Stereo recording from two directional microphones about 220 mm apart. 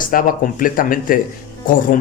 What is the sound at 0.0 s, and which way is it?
Speech, 40° left (ahead or behind).